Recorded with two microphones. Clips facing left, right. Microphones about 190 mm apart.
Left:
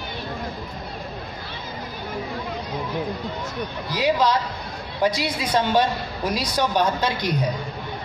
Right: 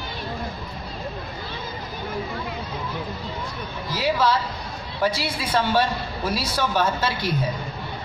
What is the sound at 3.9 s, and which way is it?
A woman's voice, 15° left (ahead or behind).